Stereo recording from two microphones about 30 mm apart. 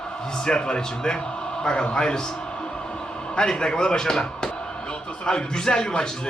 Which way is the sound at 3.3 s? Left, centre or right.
Left.